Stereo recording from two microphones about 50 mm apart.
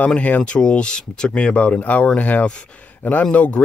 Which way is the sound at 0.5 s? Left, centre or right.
Centre.